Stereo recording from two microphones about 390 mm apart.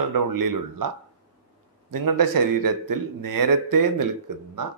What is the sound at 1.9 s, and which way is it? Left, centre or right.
A man's voice, right.